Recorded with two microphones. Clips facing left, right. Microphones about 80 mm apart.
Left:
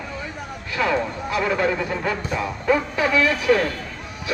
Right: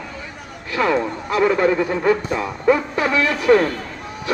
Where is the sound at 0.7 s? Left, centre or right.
Right.